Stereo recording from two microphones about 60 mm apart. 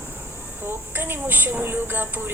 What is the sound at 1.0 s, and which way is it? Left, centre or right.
A woman's voice, right.